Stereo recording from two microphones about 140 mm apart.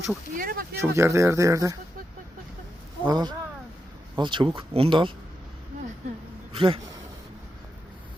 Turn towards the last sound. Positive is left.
turn(degrees=-40)  # may be behind; listen again after turning